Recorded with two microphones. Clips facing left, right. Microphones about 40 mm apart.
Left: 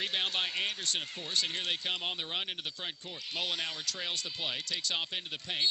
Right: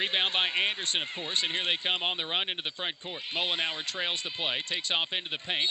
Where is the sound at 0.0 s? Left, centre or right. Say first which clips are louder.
Right 5 dB; right.